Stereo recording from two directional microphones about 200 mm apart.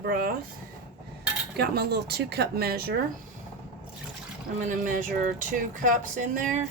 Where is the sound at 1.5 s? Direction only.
55° right (ahead or behind).